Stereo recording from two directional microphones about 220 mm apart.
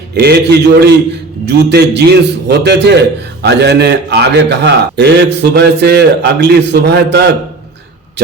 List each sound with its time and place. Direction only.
0.1 s a man's voice: 50° right (ahead or behind)